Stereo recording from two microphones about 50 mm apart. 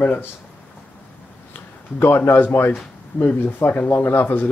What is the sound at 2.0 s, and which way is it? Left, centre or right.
Speech, left.